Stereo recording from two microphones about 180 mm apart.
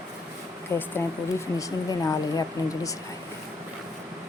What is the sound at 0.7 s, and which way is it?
Speech, 15° left (ahead or behind).